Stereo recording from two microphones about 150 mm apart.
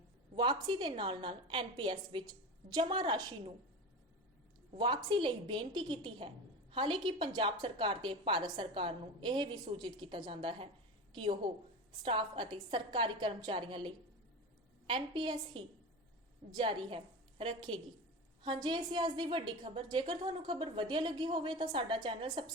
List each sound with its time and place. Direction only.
0.3 s a woman's voice: 30° right (ahead or behind)
4.7 s a woman's voice: 30° right (ahead or behind)